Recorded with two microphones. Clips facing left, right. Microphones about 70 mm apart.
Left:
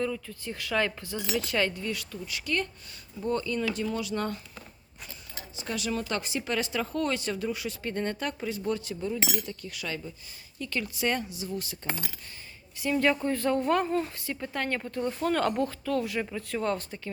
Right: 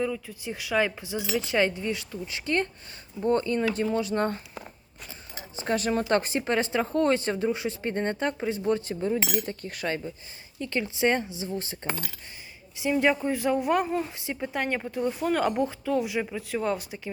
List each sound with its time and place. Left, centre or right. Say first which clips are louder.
0.0 s speech: right 2 dB; centre; by 9.2 s right
9.2 s speech: right 3 dB; centre
9.5 s speech: right 5 dB; right
12.7 s speech: right 2 dB; centre